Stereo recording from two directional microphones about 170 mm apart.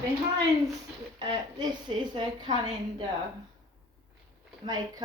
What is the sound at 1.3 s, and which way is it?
A woman's voice, 25° right (ahead or behind).